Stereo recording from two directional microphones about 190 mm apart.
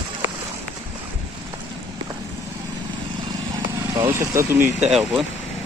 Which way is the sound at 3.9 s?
15° right (ahead or behind).